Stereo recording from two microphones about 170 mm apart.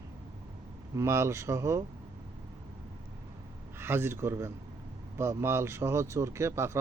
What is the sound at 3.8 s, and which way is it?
Speech, 15° right (ahead or behind).